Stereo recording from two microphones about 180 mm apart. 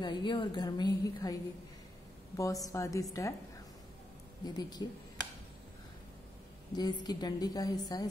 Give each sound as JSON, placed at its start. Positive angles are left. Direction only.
{"t": 0.0, "sound": "a woman's voice", "side_deg": 25}
{"t": 4.6, "sound": "a woman's voice", "side_deg": 20}
{"t": 6.7, "sound": "a woman's voice", "side_deg": 20}